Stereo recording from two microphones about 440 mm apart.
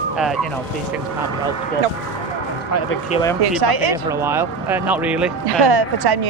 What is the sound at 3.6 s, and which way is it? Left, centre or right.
Speech, right.